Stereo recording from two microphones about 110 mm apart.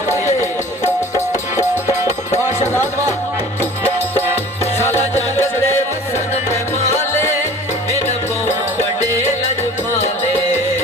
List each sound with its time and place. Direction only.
2.3 s music: 20° left (ahead or behind)
5.1 s music: 20° left (ahead or behind)